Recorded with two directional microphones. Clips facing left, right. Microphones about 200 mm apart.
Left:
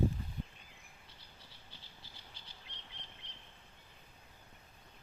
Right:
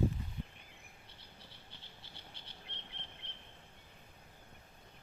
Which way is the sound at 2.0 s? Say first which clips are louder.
Right 2 dB; 60° right (ahead or behind).